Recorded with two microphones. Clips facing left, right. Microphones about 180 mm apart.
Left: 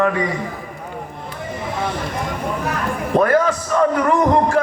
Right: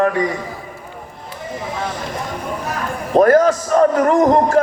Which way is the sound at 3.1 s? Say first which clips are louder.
Right 5 dB; 40° right (ahead or behind).